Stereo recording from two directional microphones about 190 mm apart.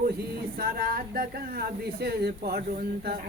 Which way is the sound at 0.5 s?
50° right (ahead or behind).